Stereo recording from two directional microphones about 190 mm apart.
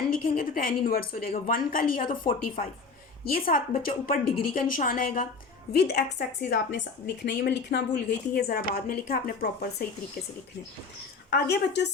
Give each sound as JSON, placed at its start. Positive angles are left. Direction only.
{"t": 0.1, "sound": "a woman's voice", "side_deg": 50}
{"t": 5.7, "sound": "a woman's voice", "side_deg": 60}
{"t": 11.3, "sound": "a woman's voice", "side_deg": 65}